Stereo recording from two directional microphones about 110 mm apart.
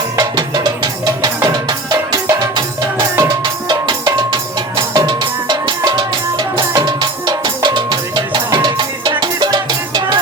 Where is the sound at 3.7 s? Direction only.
40° right (ahead or behind).